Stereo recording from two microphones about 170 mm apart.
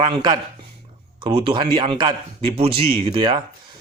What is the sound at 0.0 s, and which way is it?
A man's voice, 25° right (ahead or behind).